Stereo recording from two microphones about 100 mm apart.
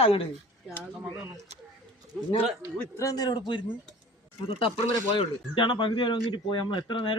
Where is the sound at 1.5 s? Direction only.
90° right.